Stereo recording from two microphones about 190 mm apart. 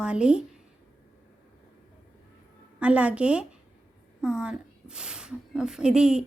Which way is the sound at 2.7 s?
5° right (ahead or behind).